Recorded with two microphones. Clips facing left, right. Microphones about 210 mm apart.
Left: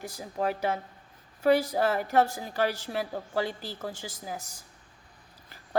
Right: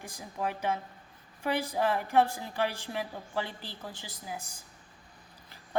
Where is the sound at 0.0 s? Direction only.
40° left (ahead or behind).